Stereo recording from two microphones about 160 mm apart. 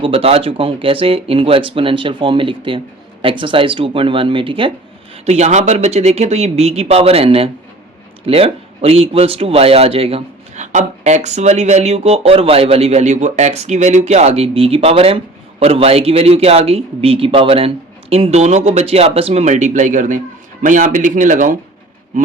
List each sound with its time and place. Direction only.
0.0 s speech: 35° right (ahead or behind); by 21.5 s 55° right (ahead or behind)